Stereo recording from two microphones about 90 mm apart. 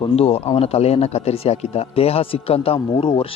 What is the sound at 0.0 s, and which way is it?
Speech, 90° left.